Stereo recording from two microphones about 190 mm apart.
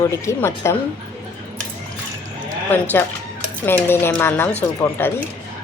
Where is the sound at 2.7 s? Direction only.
10° left (ahead or behind).